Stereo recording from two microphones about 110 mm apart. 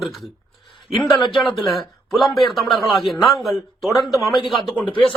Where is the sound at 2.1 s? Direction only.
Centre (ahead or behind).